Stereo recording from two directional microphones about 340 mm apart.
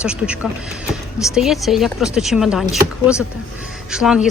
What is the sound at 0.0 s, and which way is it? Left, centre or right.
Speech, centre.